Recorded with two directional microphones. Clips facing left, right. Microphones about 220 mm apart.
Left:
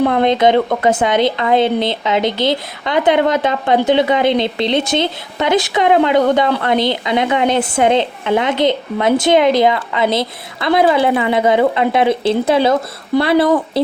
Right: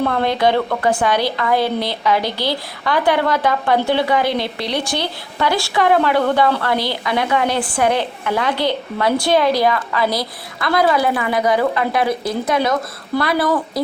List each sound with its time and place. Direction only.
0.0 s a woman's voice: 20° left (ahead or behind)